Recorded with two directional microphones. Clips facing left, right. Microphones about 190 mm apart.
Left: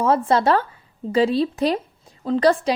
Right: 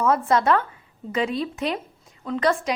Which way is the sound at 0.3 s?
30° left (ahead or behind).